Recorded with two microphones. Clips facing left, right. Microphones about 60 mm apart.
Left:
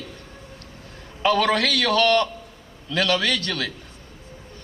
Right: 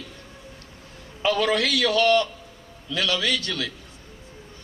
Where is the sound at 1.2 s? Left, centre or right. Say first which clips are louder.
Left 2 dB; left.